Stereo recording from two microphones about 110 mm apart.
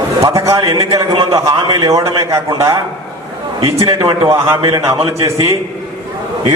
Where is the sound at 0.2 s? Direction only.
30° right (ahead or behind).